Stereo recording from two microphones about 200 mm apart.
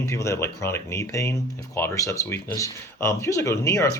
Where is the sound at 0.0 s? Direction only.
15° left (ahead or behind).